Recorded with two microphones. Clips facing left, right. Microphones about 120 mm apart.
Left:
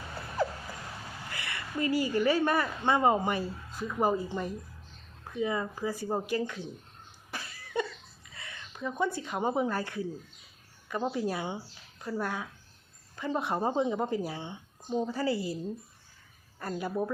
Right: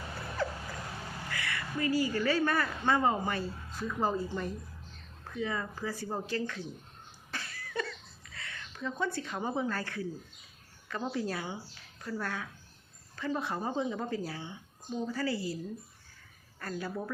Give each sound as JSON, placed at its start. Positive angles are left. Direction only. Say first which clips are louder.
{"t": 1.3, "sound": "speech", "louder": "right 1 dB", "side_deg": 25}
{"t": 7.3, "sound": "a sound", "louder": "even", "side_deg": 15}
{"t": 10.8, "sound": "speech", "louder": "left 3 dB", "side_deg": 20}
{"t": 16.6, "sound": "speech", "louder": "left 5 dB", "side_deg": 20}